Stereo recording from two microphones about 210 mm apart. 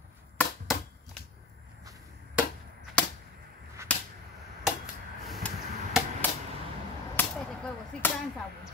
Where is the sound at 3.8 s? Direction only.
15° right (ahead or behind).